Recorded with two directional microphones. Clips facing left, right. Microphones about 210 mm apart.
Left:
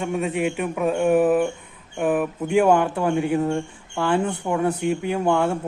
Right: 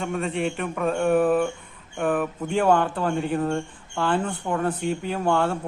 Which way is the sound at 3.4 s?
20° left (ahead or behind).